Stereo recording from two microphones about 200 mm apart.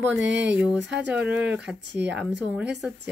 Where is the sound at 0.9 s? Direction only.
60° right (ahead or behind).